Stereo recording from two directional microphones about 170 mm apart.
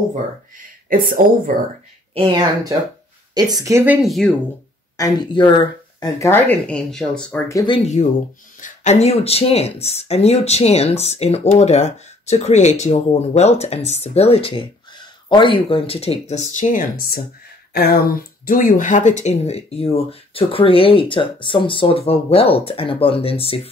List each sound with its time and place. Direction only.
0.8 s speech: 55° right (ahead or behind)
2.1 s speech: 25° right (ahead or behind); by 4.3 s centre (ahead or behind)
4.9 s speech: 20° left (ahead or behind)
7.5 s speech: 30° left (ahead or behind)
8.5 s speech: 45° left (ahead or behind)